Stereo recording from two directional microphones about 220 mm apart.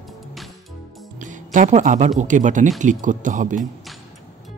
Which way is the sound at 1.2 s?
35° right (ahead or behind).